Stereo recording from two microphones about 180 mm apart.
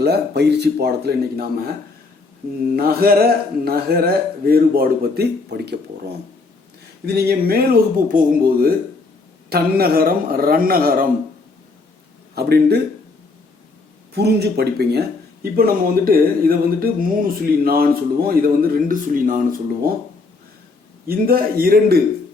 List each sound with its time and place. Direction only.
0.0 s speech: 65° right (ahead or behind)
2.7 s speech: 55° right (ahead or behind)
7.0 s speech: 60° right (ahead or behind)
12.3 s speech: 60° right (ahead or behind)
14.1 s speech: 65° right (ahead or behind)
21.1 s speech: 55° right (ahead or behind)